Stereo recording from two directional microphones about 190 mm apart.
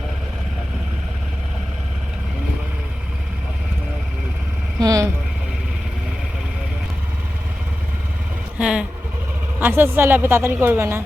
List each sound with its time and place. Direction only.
4.8 s a sound: 20° right (ahead or behind)
8.5 s vehicle: 5° right (ahead or behind)
9.6 s a woman's voice: 10° right (ahead or behind)